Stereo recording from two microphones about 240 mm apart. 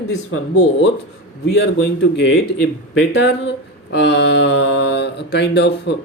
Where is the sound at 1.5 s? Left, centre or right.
Left.